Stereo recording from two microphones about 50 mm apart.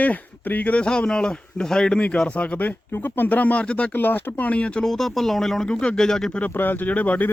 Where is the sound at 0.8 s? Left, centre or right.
Centre.